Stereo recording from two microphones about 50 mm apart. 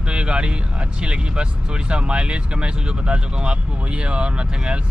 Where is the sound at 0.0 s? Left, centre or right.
Centre.